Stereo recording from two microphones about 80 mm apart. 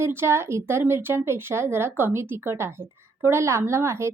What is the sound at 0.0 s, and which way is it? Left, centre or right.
A woman's voice, right.